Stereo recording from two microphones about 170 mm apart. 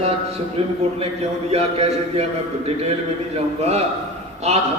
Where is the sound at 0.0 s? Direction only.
35° right (ahead or behind).